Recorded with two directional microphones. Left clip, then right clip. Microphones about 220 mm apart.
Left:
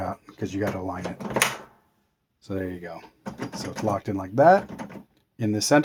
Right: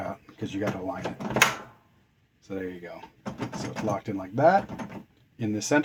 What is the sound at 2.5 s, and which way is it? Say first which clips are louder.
Speech: left 3 dB; 40° left (ahead or behind).